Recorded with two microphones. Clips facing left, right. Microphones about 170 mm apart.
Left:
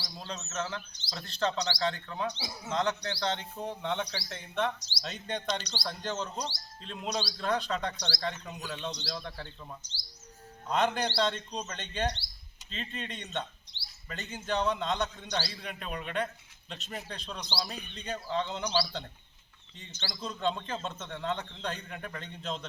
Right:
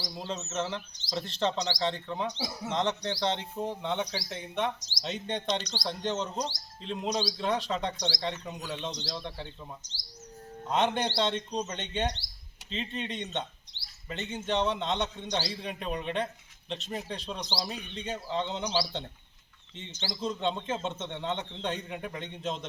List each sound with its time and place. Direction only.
0.0 s speech: 20° right (ahead or behind)
9.8 s bird: 45° right (ahead or behind)
10.7 s speech: 20° right (ahead or behind)